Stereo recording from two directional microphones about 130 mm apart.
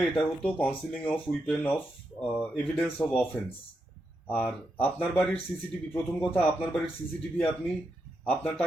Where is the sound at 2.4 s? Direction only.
10° left (ahead or behind).